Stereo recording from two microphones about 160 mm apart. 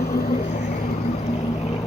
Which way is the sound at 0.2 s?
50° left (ahead or behind).